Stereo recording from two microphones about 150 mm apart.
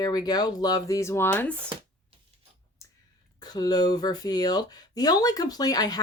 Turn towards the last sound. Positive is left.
turn(degrees=25)  # may be behind; listen again after turning